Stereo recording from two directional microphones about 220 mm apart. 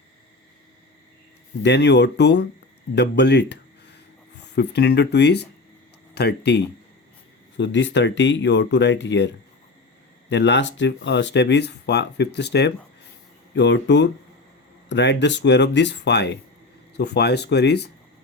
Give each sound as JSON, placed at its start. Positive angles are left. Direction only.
{"t": 1.6, "sound": "speech", "side_deg": 50}